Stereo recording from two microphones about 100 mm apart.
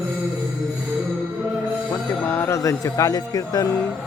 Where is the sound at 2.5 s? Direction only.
35° left (ahead or behind).